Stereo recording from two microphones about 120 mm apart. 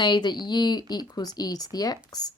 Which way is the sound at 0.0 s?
40° left (ahead or behind).